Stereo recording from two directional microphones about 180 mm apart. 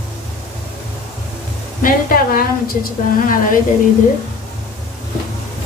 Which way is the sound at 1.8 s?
50° left (ahead or behind).